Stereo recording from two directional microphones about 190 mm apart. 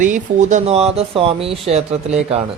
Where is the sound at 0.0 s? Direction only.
40° right (ahead or behind).